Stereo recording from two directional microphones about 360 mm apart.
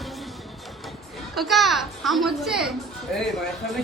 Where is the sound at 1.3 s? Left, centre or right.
Centre.